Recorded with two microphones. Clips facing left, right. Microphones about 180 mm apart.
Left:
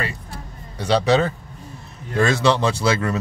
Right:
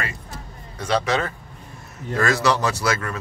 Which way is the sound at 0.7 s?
30° left (ahead or behind).